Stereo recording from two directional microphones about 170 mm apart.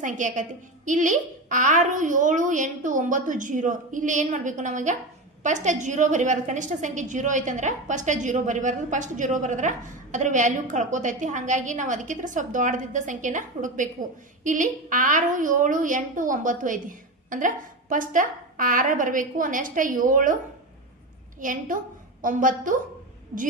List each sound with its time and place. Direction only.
0.0 s a woman's voice: 50° right (ahead or behind)
21.4 s a woman's voice: 50° right (ahead or behind)